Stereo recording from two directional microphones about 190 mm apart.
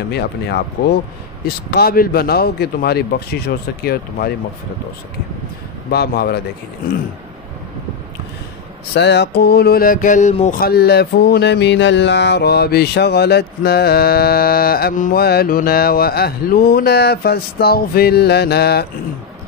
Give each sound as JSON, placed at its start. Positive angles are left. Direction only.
{"t": 0.1, "sound": "speech", "side_deg": 60}
{"t": 1.7, "sound": "speech", "side_deg": 55}
{"t": 5.9, "sound": "speech", "side_deg": 55}
{"t": 8.9, "sound": "speech", "side_deg": 65}
{"t": 10.5, "sound": "speech", "side_deg": 55}